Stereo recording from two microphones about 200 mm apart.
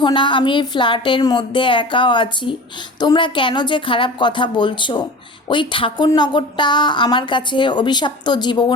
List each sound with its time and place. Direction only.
0.0 s speech: 25° left (ahead or behind)